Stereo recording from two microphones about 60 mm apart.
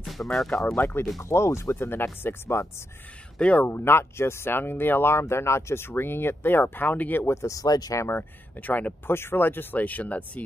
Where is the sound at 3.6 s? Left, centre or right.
Left.